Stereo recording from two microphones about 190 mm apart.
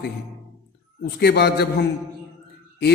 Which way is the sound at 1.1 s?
60° left (ahead or behind).